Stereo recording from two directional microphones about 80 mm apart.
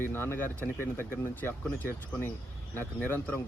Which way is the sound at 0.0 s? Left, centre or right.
Left.